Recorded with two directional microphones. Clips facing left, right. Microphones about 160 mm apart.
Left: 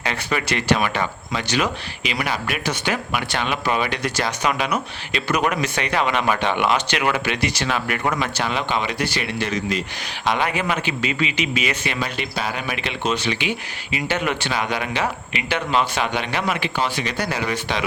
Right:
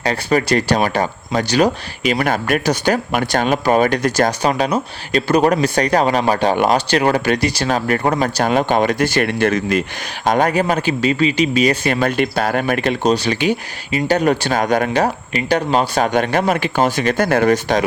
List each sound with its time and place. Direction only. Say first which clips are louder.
0.0 s speech: right 8 dB; 40° right (ahead or behind)
11.9 s speech: right 9 dB; 50° right (ahead or behind)